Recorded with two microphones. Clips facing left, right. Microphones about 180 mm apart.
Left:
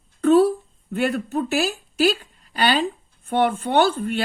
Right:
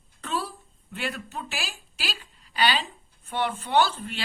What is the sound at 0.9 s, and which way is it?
A woman's voice, 45° left (ahead or behind).